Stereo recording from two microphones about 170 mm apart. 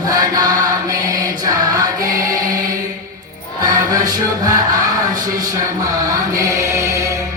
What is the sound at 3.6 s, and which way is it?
Music, 20° right (ahead or behind).